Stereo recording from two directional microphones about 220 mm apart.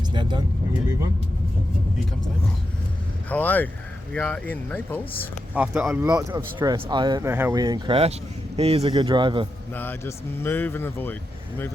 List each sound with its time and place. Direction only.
0.1 s speech: 20° right (ahead or behind)
3.2 s speech: 5° left (ahead or behind)
5.5 s speech: 5° right (ahead or behind)
6.1 s speech: 15° right (ahead or behind)
9.7 s speech: 10° left (ahead or behind)